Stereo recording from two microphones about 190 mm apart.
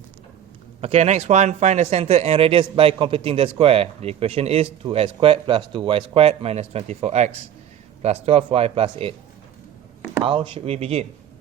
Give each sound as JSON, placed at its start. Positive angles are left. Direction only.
{"t": 0.8, "sound": "speech", "side_deg": -35}
{"t": 10.2, "sound": "speech", "side_deg": -30}